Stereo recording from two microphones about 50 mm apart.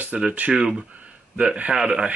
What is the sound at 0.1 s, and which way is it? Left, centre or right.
Speech, centre.